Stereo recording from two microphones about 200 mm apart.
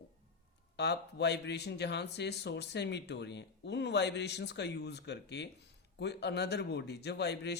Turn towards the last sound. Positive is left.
turn(degrees=55)  # may be behind; listen again after turning